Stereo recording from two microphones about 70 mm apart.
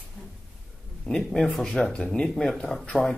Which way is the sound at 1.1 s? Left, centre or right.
Centre.